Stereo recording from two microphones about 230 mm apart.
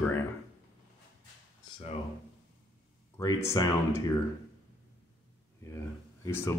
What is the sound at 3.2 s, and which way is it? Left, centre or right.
Speech, centre.